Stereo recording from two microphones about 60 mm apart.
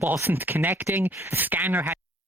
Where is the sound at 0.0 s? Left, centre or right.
Right.